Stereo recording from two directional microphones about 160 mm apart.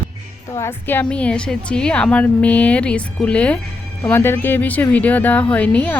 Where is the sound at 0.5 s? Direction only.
15° left (ahead or behind).